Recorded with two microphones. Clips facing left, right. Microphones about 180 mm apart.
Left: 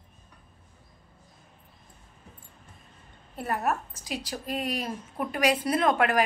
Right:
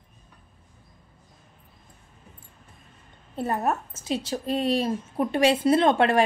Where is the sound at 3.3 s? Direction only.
25° right (ahead or behind).